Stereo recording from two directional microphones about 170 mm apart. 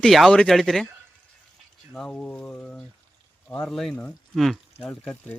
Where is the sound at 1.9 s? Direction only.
5° left (ahead or behind).